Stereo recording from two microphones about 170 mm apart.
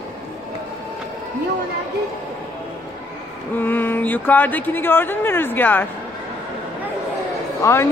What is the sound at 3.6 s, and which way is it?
Speech, 10° left (ahead or behind).